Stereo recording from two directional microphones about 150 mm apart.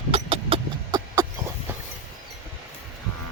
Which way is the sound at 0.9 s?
25° right (ahead or behind).